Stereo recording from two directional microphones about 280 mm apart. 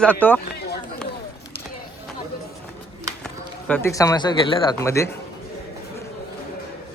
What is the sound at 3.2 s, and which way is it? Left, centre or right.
Speech, centre.